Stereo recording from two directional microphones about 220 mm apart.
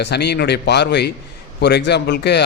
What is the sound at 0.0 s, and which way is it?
A man's voice, 50° left (ahead or behind).